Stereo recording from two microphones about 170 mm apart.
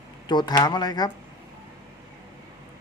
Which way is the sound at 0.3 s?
25° left (ahead or behind).